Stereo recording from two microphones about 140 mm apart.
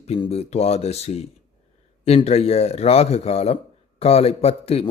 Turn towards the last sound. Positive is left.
turn(degrees=45)  # may be behind; listen again after turning